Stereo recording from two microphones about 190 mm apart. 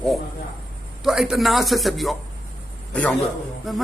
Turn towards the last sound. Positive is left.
turn(degrees=0)  # may be behind; listen again after turning